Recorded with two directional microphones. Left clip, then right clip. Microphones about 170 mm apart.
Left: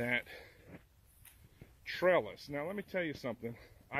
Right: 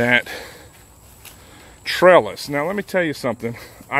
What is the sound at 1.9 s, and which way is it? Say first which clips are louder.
Speech: right 19 dB; centre (ahead or behind).